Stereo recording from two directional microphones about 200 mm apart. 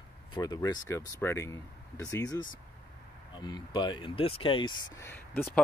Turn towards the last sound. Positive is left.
turn(degrees=10)  # may be behind; listen again after turning